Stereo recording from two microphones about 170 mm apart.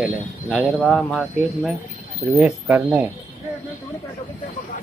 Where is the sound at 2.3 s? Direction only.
5° right (ahead or behind).